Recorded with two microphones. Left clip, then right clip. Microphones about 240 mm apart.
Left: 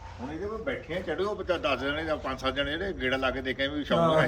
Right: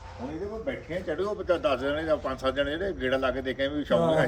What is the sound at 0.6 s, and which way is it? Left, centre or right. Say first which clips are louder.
A man's voice: right 1 dB; centre.